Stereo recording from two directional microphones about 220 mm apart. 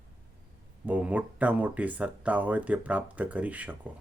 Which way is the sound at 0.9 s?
5° right (ahead or behind).